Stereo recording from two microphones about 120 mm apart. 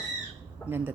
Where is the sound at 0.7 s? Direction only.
15° right (ahead or behind).